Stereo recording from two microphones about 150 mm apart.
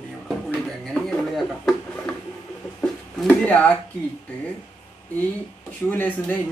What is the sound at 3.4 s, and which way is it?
Speech, 10° left (ahead or behind).